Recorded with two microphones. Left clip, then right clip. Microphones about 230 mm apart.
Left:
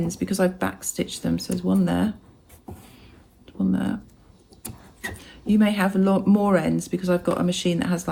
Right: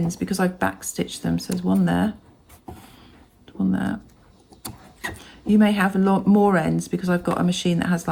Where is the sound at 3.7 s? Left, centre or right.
Right.